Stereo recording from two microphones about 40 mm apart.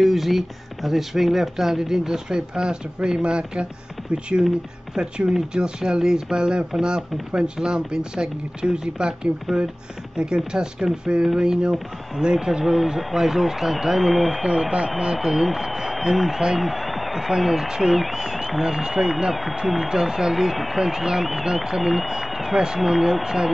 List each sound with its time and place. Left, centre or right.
0.0 s speech: centre; by 3.6 s right
4.9 s speech: right; by 14.4 s centre
14.4 s speech: centre
19.9 s speech: centre
20.8 s speech: centre